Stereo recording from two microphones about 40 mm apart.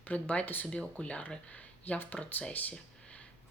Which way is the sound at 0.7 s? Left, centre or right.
Left.